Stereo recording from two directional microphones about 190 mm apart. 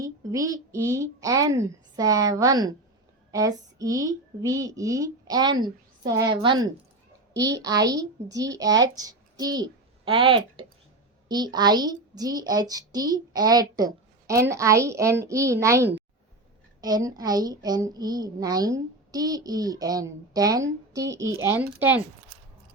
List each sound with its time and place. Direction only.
0.0 s a woman's voice: 20° right (ahead or behind)